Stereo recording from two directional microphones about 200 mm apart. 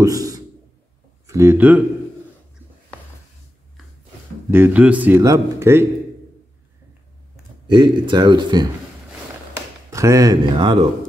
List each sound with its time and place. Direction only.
0.0 s a man's voice: 15° right (ahead or behind)
4.5 s a man's voice: 10° right (ahead or behind)
7.6 s a man's voice: 20° right (ahead or behind)
9.8 s speech: 15° right (ahead or behind)